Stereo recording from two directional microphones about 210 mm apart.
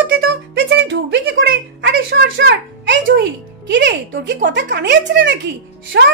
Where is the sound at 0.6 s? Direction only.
55° right (ahead or behind).